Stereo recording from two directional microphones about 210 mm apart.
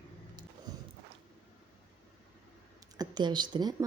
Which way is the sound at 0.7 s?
20° right (ahead or behind).